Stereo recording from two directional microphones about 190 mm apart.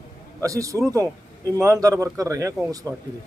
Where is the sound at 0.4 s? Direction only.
15° right (ahead or behind).